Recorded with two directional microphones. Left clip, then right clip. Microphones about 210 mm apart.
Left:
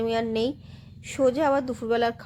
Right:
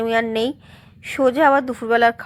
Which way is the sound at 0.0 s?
15° right (ahead or behind).